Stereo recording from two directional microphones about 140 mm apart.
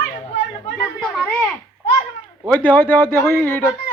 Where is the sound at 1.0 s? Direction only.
5° left (ahead or behind).